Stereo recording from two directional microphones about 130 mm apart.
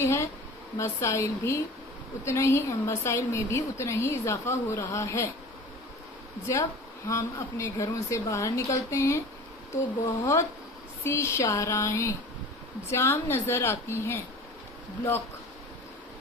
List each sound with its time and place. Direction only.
0.0 s a sound: 20° left (ahead or behind)
0.7 s a woman's voice: 20° left (ahead or behind)
6.4 s a woman's voice: 25° left (ahead or behind)